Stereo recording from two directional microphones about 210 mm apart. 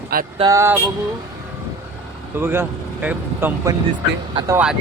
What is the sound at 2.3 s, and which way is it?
Speech, 10° right (ahead or behind).